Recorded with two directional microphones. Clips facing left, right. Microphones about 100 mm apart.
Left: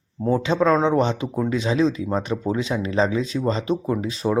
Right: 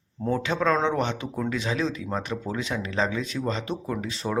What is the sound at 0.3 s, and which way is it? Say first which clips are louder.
Speech: left 5 dB; 25° left (ahead or behind).